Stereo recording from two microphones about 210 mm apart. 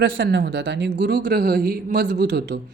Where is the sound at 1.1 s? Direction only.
45° right (ahead or behind).